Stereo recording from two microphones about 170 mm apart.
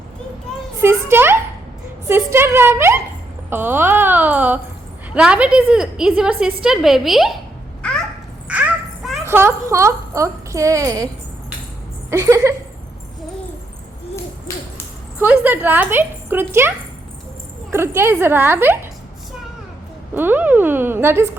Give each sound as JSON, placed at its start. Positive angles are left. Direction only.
{"t": 0.8, "sound": "a woman's voice", "side_deg": -15}
{"t": 8.4, "sound": "children playing", "side_deg": -10}
{"t": 9.2, "sound": "speech", "side_deg": -15}
{"t": 12.1, "sound": "speech", "side_deg": -15}
{"t": 15.2, "sound": "speech", "side_deg": -10}
{"t": 20.1, "sound": "speech", "side_deg": -10}